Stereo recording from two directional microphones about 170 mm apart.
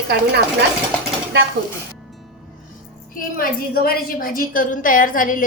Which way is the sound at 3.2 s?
55° left (ahead or behind).